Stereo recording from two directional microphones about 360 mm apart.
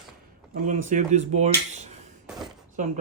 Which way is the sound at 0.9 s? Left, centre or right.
Centre.